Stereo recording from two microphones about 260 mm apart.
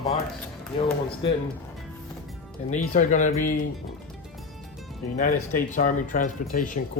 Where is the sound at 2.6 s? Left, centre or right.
Left.